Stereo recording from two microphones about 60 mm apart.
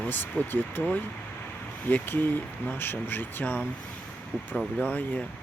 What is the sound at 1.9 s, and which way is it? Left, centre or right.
Speech, left.